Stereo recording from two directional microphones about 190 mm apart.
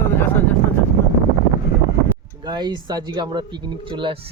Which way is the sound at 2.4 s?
20° right (ahead or behind).